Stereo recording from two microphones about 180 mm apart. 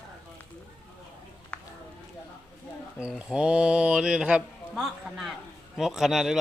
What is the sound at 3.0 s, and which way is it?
Speech, 5° right (ahead or behind).